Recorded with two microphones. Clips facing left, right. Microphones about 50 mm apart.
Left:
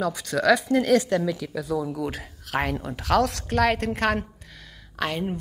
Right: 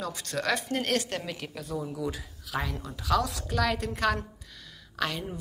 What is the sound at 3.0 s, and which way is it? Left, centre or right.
Speech, left.